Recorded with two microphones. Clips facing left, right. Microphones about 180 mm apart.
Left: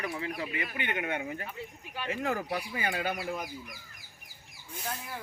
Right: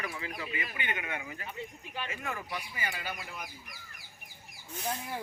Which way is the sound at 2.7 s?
55° left (ahead or behind).